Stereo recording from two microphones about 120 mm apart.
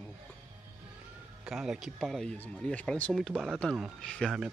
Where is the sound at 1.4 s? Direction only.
5° right (ahead or behind).